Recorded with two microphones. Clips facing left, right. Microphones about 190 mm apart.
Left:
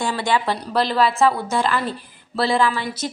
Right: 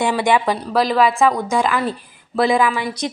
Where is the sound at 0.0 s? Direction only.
20° right (ahead or behind).